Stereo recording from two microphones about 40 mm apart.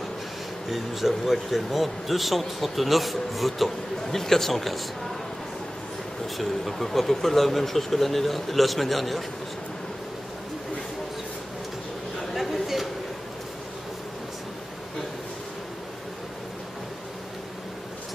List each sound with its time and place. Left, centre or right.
0.7 s speech: centre
6.3 s speech: centre
12.4 s a sound: centre